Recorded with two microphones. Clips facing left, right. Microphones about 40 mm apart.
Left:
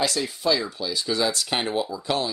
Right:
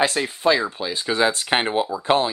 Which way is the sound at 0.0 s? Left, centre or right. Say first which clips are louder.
Right 5 dB; right.